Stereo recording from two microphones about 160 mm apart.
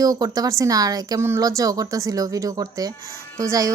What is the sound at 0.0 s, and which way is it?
Speech, 25° right (ahead or behind).